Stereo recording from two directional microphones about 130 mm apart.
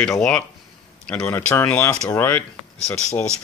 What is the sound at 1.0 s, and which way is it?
Speech, 5° left (ahead or behind).